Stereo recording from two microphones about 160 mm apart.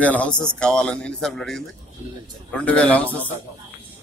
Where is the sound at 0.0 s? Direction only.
10° left (ahead or behind).